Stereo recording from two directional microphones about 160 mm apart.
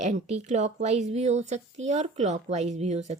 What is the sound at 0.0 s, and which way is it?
A woman's voice, 45° right (ahead or behind).